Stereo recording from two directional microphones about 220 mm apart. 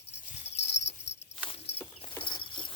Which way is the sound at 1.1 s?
50° left (ahead or behind).